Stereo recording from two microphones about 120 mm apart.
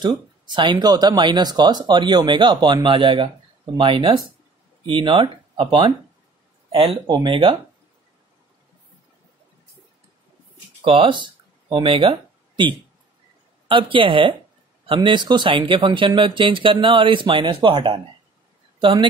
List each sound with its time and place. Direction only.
0.5 s speech: 40° right (ahead or behind)
6.7 s speech: 55° right (ahead or behind)
10.8 s speech: 45° right (ahead or behind)